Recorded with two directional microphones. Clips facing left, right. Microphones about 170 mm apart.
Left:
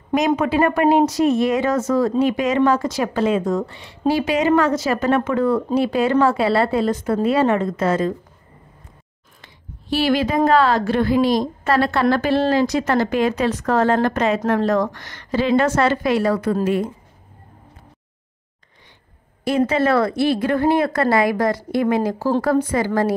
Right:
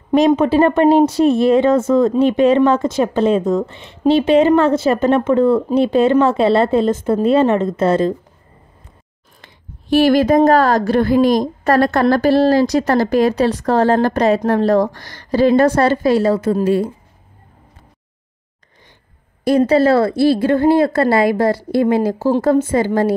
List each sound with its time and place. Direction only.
0.1 s a woman's voice: 30° right (ahead or behind)
9.4 s a woman's voice: 50° right (ahead or behind); by 16.9 s 30° right (ahead or behind)
19.4 s a woman's voice: 35° right (ahead or behind)